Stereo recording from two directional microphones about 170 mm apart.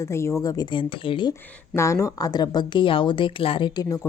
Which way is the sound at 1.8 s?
20° left (ahead or behind).